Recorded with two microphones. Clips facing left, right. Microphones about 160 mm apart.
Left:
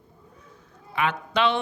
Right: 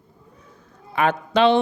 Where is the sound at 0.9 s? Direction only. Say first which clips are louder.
Right 6 dB; 40° right (ahead or behind).